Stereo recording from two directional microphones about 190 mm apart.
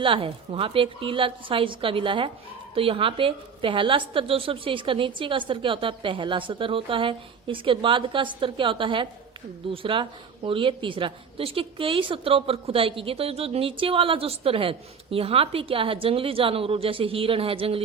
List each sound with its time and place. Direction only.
0.0 s a woman's voice: 30° right (ahead or behind)